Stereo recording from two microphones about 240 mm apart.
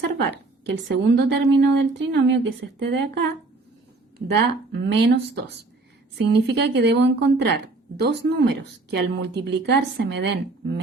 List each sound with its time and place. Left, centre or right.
0.2 s speech: right
4.4 s speech: right